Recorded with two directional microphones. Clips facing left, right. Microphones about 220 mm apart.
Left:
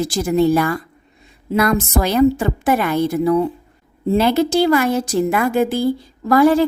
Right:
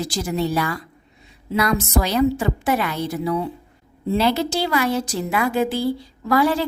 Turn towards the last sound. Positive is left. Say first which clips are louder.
# left 6 dB
turn(degrees=50)  # may be behind; listen again after turning